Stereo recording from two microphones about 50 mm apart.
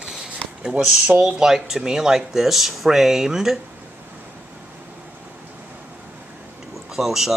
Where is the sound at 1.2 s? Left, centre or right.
Centre.